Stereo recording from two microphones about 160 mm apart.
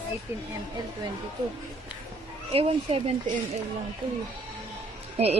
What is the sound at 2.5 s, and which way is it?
Speech, 35° right (ahead or behind).